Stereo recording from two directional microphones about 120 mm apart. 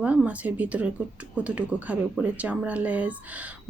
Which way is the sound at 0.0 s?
10° right (ahead or behind).